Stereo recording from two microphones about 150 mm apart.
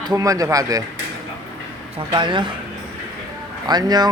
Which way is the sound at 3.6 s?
25° right (ahead or behind).